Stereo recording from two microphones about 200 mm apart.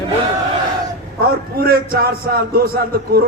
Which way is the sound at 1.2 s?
50° right (ahead or behind).